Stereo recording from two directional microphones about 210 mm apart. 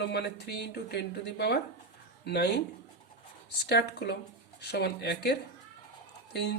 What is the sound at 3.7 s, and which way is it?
Speech, 50° left (ahead or behind).